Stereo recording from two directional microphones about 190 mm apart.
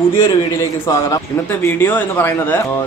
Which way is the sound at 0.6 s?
15° left (ahead or behind).